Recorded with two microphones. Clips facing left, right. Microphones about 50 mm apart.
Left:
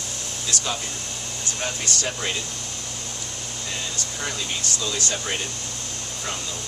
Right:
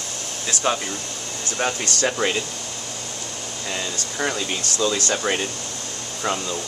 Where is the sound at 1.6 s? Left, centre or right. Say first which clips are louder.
Right 6 dB; right.